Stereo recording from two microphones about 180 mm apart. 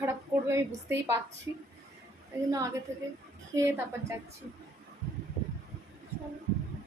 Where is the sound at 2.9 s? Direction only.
15° right (ahead or behind).